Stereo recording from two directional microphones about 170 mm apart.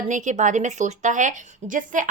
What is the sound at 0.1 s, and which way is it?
Speech, 50° right (ahead or behind).